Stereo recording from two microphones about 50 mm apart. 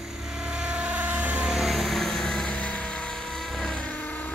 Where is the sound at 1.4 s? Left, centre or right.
Centre.